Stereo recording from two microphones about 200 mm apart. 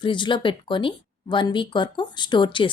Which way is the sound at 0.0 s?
25° left (ahead or behind).